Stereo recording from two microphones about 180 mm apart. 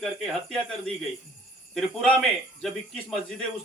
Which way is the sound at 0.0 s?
Centre (ahead or behind).